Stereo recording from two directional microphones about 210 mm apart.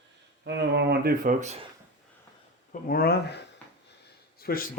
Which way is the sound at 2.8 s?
45° left (ahead or behind).